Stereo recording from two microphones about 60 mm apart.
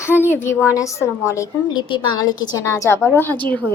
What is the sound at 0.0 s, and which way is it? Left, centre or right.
Speech, left.